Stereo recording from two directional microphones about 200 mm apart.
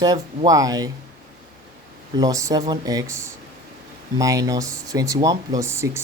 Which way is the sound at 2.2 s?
15° right (ahead or behind).